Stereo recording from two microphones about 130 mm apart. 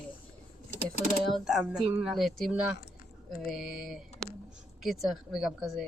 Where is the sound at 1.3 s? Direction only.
5° right (ahead or behind).